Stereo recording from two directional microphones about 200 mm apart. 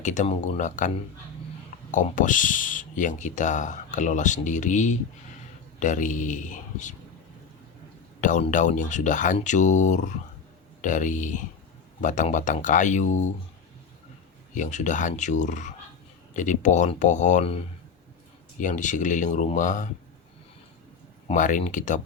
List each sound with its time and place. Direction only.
0.0 s speech: 35° left (ahead or behind)
1.9 s speech: 40° left (ahead or behind)
8.2 s speech: 40° left (ahead or behind)
14.5 s speech: 40° left (ahead or behind)
18.6 s speech: 40° left (ahead or behind)
21.2 s speech: 40° left (ahead or behind)